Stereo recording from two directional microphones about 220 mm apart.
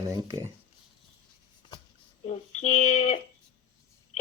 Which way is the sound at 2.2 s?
30° left (ahead or behind).